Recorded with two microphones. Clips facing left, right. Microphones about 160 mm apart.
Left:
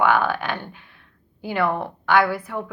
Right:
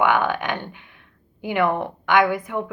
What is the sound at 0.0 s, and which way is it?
A woman's voice, 15° right (ahead or behind).